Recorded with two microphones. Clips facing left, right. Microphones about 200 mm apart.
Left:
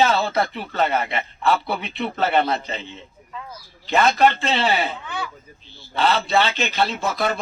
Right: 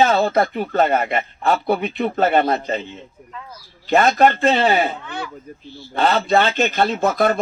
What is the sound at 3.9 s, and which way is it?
Speech, 45° right (ahead or behind).